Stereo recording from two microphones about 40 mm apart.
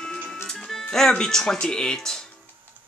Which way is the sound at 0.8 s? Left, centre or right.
Centre.